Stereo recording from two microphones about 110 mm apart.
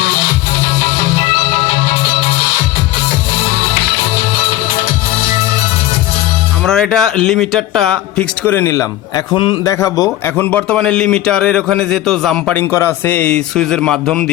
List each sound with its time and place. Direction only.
6.7 s speech: 5° left (ahead or behind)
8.4 s a man's voice: 20° left (ahead or behind)
8.7 s a man's voice: 30° left (ahead or behind)
9.3 s a man's voice: 50° left (ahead or behind)
9.6 s a man's voice: 30° left (ahead or behind)
10.3 s a man's voice: 10° left (ahead or behind)
12.5 s a man's voice: 20° left (ahead or behind)